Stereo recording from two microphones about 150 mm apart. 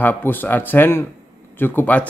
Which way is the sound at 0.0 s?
10° left (ahead or behind).